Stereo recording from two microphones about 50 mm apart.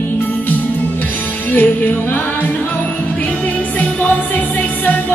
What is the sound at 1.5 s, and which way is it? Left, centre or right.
Music, left.